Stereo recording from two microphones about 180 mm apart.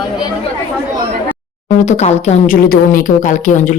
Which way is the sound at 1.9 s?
40° left (ahead or behind).